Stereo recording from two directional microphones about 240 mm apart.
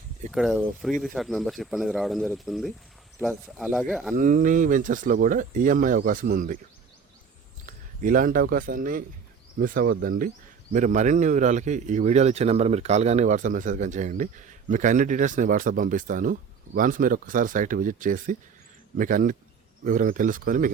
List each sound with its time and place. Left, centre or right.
0.3 s speech: centre
4.1 s a man's voice: right
7.7 s a man's voice: right